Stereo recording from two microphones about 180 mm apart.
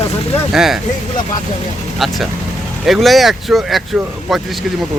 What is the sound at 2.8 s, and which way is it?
Speech, centre (ahead or behind).